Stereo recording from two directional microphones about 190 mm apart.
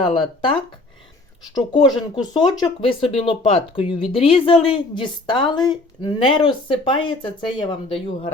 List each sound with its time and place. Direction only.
0.0 s a woman's voice: 25° left (ahead or behind)
1.5 s a woman's voice: 25° left (ahead or behind)